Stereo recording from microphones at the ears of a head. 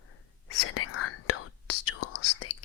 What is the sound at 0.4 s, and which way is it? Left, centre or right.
Whispering, left.